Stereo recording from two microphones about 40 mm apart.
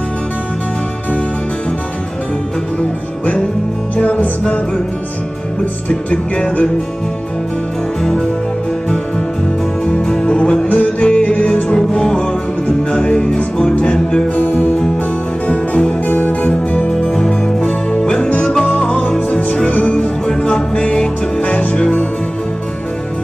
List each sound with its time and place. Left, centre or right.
3.9 s music: left
5.9 s music: left
8.0 s music: left
9.8 s music: left
14.3 s music: left
15.4 s music: left
17.6 s music: left
18.7 s music: left
20.0 s music: left